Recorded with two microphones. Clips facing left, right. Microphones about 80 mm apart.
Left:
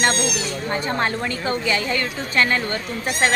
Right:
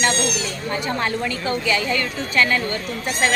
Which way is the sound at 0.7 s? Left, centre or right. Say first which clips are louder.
Even; left.